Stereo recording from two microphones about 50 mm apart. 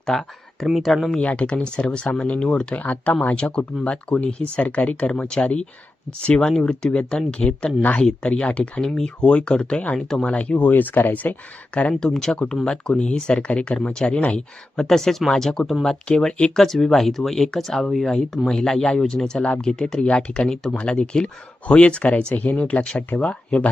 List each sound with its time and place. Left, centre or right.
0.0 s a sound: centre
1.2 s speech: left
2.7 s speech: left
5.1 s speech: centre
7.8 s speech: left
8.0 s speech: centre
8.8 s speech: centre
11.9 s speech: centre; by 14.4 s left
14.8 s speech: centre